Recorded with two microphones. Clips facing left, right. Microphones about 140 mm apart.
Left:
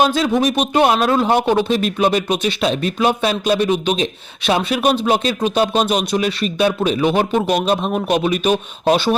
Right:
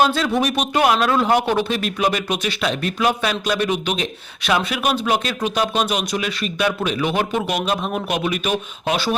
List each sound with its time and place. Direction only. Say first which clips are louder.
0.0 s speech: left 3 dB; 20° left (ahead or behind)